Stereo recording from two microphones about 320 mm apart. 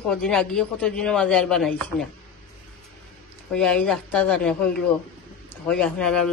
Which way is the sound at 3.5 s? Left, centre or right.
Centre.